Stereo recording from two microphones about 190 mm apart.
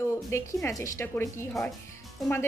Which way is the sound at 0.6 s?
15° left (ahead or behind).